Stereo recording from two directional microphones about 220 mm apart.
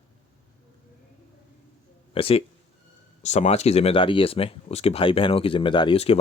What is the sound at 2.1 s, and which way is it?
Speech, 25° left (ahead or behind).